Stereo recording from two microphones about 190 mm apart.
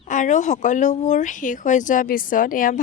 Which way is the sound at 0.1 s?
40° left (ahead or behind).